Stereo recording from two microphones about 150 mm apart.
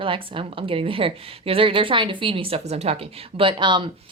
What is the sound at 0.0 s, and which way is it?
A woman's voice, 35° right (ahead or behind).